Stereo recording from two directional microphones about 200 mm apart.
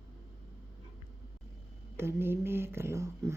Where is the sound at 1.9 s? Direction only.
10° right (ahead or behind).